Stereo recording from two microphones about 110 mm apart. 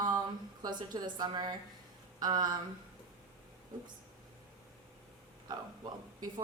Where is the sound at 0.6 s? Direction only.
40° right (ahead or behind).